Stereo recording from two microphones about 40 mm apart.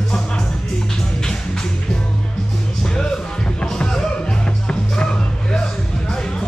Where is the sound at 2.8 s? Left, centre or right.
Centre.